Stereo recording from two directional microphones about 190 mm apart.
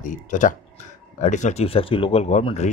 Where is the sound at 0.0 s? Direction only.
40° left (ahead or behind).